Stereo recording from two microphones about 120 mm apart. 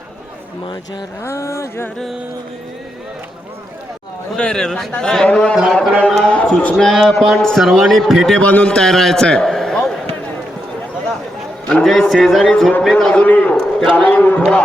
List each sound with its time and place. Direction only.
1.2 s a sound: 25° left (ahead or behind)
4.4 s a man's voice: 5° left (ahead or behind)
11.7 s a man's voice: 5° left (ahead or behind)